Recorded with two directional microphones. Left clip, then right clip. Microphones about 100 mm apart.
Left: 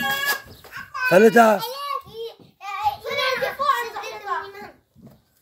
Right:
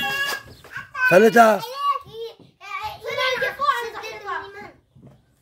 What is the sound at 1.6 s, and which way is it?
Children playing, 15° left (ahead or behind).